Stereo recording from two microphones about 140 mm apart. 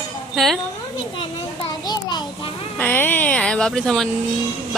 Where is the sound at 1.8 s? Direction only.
30° left (ahead or behind).